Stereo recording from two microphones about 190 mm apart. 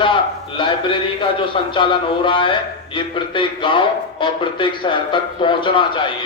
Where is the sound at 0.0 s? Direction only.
25° left (ahead or behind).